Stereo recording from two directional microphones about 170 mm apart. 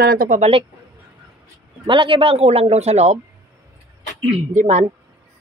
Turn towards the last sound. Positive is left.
turn(degrees=-45)  # may be behind; listen again after turning